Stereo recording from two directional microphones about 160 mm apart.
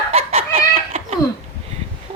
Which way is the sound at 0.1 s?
40° right (ahead or behind).